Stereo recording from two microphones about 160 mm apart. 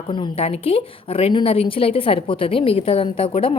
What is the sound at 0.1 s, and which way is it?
A woman's voice, 35° left (ahead or behind).